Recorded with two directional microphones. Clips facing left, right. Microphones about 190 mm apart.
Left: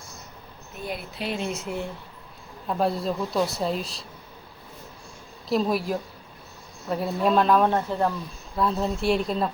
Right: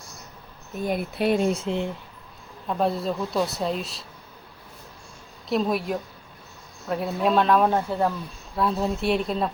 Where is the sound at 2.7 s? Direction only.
Centre (ahead or behind).